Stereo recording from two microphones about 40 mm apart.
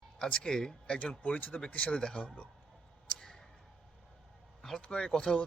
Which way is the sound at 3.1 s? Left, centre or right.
Centre.